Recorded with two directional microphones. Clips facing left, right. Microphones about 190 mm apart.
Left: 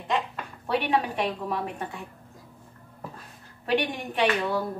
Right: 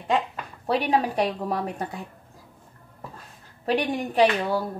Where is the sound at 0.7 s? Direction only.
35° right (ahead or behind).